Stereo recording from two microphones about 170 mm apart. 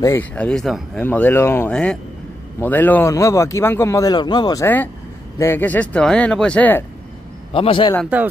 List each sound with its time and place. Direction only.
0.0 s a man's voice: 10° left (ahead or behind)
5.4 s a man's voice: 10° left (ahead or behind)
7.5 s a man's voice: 30° left (ahead or behind)
8.1 s speech: 10° right (ahead or behind)